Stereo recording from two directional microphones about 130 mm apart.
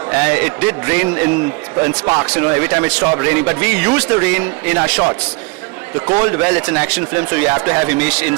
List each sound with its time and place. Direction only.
0.1 s a man's voice: 15° right (ahead or behind)
2.2 s a man's voice: 10° right (ahead or behind)
6.2 s a man's voice: 15° right (ahead or behind)